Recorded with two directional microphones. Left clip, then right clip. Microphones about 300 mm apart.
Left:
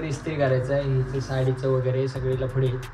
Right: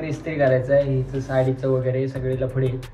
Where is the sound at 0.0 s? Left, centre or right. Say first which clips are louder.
Right 4 dB; centre.